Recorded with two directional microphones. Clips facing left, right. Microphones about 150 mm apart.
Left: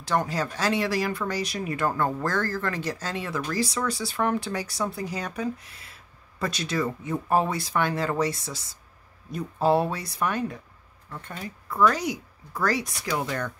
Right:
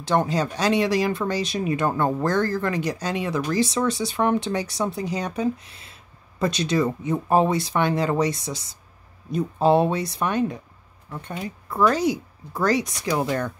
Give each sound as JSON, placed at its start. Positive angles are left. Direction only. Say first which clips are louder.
{"t": 0.0, "sound": "speech", "louder": "right 4 dB", "side_deg": -25}